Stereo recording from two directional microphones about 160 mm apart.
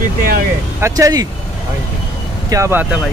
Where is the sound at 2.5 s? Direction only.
15° right (ahead or behind).